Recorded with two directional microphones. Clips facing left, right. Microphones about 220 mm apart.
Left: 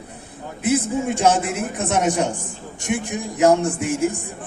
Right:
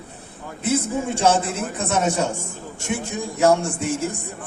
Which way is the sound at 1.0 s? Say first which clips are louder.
Even; 15° left (ahead or behind).